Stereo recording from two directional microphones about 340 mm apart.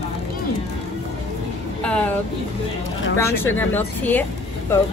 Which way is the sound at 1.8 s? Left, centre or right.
Centre.